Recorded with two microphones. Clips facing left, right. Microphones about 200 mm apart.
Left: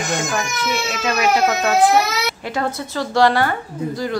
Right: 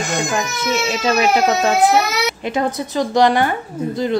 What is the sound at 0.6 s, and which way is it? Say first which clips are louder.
Speech: right 3 dB; 25° right (ahead or behind).